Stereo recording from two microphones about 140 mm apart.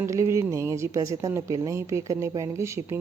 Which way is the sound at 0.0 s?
20° right (ahead or behind).